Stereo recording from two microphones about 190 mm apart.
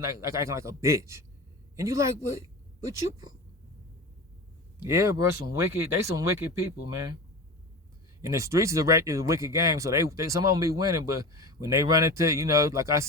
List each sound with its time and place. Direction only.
0.2 s speech: 15° right (ahead or behind)
4.9 s speech: 15° right (ahead or behind)
8.2 s speech: 15° right (ahead or behind)